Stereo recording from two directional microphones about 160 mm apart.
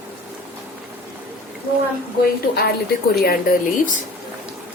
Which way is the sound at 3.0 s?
70° left (ahead or behind).